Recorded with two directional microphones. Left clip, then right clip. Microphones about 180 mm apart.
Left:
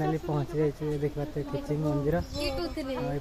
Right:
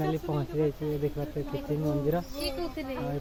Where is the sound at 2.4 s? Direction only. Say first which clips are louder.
Left 2 dB; 50° left (ahead or behind).